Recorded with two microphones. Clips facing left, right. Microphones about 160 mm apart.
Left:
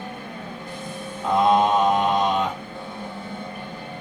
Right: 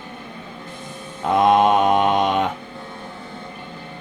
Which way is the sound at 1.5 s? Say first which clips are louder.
Right 3 dB; 70° right (ahead or behind).